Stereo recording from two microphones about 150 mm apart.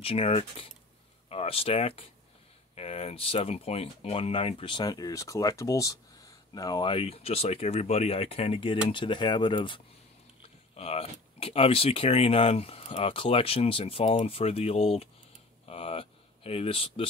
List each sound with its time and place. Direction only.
0.0 s speech: 40° left (ahead or behind)
10.8 s speech: 40° left (ahead or behind)